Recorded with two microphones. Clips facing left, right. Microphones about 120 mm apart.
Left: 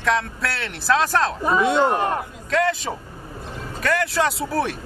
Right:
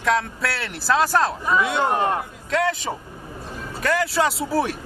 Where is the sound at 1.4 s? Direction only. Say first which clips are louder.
Left 3 dB; 30° left (ahead or behind).